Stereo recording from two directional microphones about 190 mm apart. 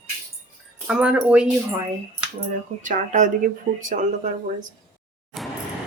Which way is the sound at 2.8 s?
40° right (ahead or behind).